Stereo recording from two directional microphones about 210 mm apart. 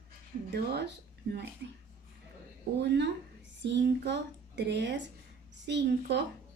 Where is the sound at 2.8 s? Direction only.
55° right (ahead or behind).